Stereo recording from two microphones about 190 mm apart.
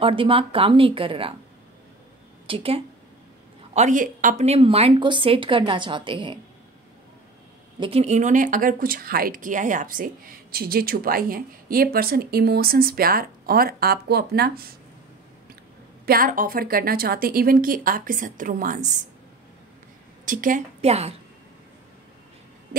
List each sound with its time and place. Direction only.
0.0 s speech: 30° right (ahead or behind)
2.4 s a woman's voice: 30° right (ahead or behind)
3.7 s speech: 40° right (ahead or behind); by 6.4 s 25° right (ahead or behind)
7.8 s a woman's voice: 35° right (ahead or behind); by 14.7 s 55° right (ahead or behind)
16.1 s a woman's voice: 45° right (ahead or behind)
20.2 s a woman's voice: 45° right (ahead or behind)